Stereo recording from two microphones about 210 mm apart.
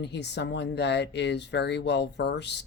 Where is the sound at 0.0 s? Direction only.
55° left (ahead or behind).